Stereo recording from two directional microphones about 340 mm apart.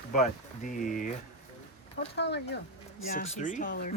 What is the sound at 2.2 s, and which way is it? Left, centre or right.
Speech, left.